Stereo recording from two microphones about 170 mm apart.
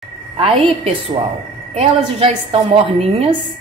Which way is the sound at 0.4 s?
35° right (ahead or behind).